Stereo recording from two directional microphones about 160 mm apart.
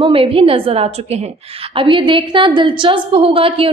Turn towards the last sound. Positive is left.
turn(degrees=-35)  # may be behind; listen again after turning